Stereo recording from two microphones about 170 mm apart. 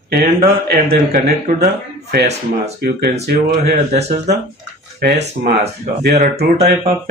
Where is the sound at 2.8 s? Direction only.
70° right (ahead or behind).